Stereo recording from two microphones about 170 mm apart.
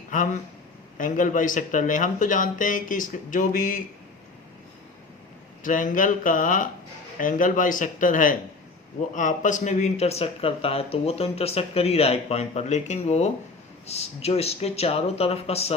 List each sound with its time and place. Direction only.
0.1 s speech: 50° left (ahead or behind)
5.6 s speech: 50° left (ahead or behind)